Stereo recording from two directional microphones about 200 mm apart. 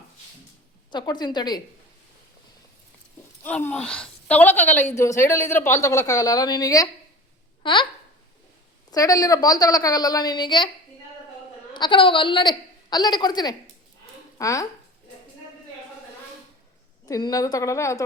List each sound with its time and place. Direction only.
0.9 s a woman's voice: 20° left (ahead or behind)
3.4 s a woman's voice: 10° left (ahead or behind)
8.9 s a woman's voice: 15° left (ahead or behind)
11.7 s a woman's voice: 25° left (ahead or behind)
17.1 s a woman's voice: 20° left (ahead or behind)